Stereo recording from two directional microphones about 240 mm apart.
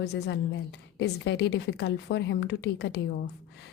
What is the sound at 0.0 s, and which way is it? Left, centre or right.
A woman's voice, left.